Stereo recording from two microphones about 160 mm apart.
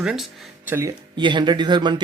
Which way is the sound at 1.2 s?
30° right (ahead or behind).